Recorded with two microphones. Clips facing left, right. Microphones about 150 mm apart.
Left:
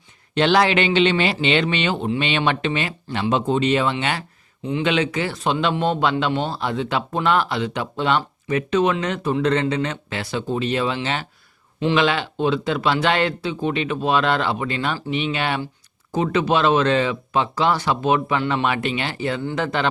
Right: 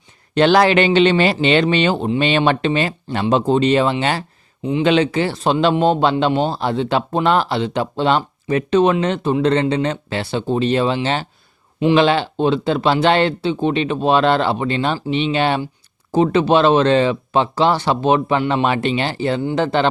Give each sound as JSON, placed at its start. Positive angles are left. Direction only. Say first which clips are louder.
{"t": 0.3, "sound": "speech", "louder": "right 4 dB", "side_deg": -45}